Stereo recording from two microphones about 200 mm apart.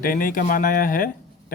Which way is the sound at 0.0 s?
45° left (ahead or behind).